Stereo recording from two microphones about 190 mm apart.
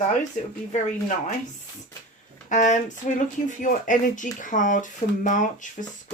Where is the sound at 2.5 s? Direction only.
40° left (ahead or behind).